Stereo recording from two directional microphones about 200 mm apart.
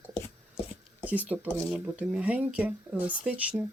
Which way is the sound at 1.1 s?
10° right (ahead or behind).